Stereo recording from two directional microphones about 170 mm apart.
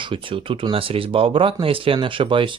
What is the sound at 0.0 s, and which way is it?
Speech, 30° right (ahead or behind).